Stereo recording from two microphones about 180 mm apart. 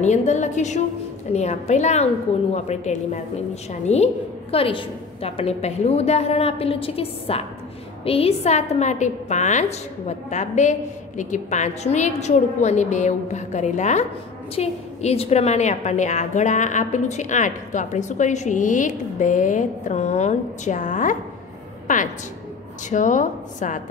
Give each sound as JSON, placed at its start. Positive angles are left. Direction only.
{"t": 0.0, "sound": "a woman's voice", "side_deg": 40}